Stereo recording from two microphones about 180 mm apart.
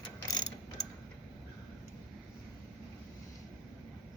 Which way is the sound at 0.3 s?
20° left (ahead or behind).